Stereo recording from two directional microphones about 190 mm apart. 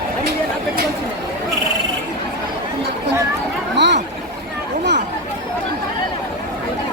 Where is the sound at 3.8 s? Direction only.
65° right (ahead or behind).